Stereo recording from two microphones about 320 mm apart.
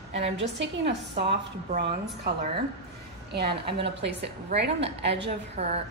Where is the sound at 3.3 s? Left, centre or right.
Right.